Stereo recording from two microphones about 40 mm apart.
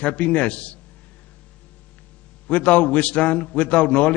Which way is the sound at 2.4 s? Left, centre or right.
Left.